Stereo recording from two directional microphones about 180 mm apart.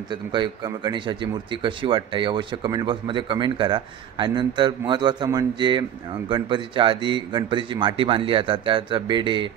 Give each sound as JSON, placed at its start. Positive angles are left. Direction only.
{"t": 0.1, "sound": "speech", "side_deg": -25}